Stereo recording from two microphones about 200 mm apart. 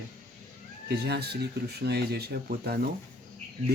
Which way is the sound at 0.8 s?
55° right (ahead or behind).